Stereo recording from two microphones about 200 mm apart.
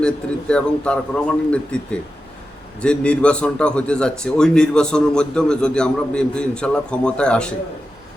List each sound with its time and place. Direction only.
0.0 s a man's voice: 5° left (ahead or behind)